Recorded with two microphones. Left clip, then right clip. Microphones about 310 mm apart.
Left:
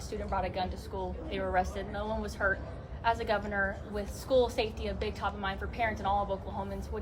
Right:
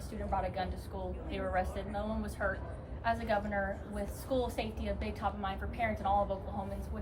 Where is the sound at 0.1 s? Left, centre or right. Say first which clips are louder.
Left 2 dB; left.